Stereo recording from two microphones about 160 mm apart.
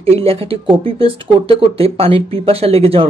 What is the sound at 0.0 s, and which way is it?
Speech, 35° right (ahead or behind).